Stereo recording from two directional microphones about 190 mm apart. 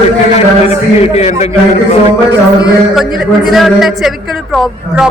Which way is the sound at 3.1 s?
Centre (ahead or behind).